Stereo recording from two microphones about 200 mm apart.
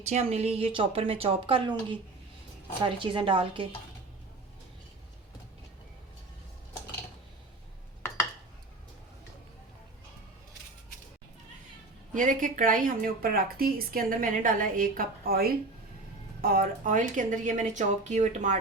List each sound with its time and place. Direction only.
0.0 s speech: 30° right (ahead or behind)
2.8 s speech: 25° right (ahead or behind)
12.1 s a woman's voice: 40° right (ahead or behind)